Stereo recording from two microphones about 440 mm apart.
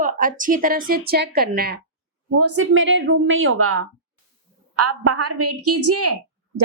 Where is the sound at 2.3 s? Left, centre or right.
Right.